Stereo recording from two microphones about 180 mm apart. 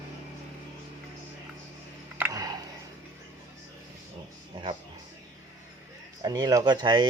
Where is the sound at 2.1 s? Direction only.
15° right (ahead or behind).